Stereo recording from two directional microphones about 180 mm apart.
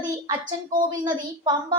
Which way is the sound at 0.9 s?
25° right (ahead or behind).